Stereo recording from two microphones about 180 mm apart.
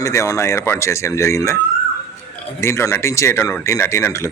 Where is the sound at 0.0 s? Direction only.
15° left (ahead or behind).